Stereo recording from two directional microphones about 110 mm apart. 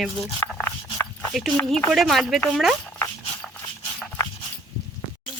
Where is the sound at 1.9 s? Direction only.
Centre (ahead or behind).